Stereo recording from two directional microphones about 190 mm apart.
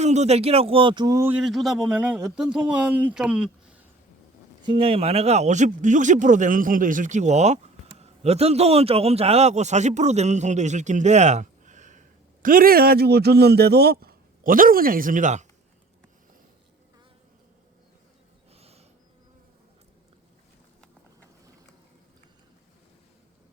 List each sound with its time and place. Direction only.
0.0 s speech: 35° right (ahead or behind); by 3.5 s 5° right (ahead or behind)
4.6 s speech: 25° right (ahead or behind)
18.5 s a sound: 30° right (ahead or behind)